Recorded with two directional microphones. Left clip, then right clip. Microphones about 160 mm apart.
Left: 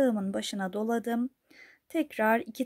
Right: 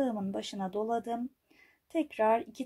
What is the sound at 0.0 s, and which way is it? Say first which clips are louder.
Speech: left 5 dB; 45° left (ahead or behind).